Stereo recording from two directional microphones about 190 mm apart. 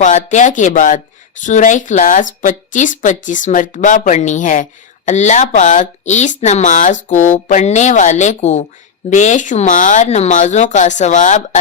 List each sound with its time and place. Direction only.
0.0 s speech: 40° left (ahead or behind)